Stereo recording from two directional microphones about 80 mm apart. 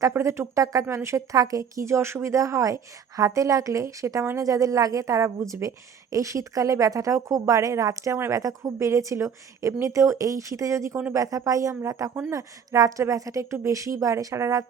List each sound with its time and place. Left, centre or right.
0.1 s a woman's voice: right